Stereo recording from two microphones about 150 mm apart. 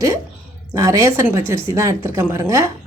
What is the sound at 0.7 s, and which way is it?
A woman's voice, 20° right (ahead or behind).